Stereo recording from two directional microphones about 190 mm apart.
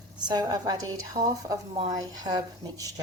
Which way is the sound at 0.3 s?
20° right (ahead or behind).